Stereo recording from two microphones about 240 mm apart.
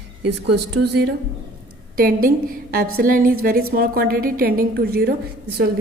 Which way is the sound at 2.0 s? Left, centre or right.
Right.